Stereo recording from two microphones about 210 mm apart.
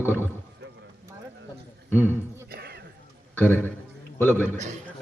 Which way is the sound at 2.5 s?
50° right (ahead or behind).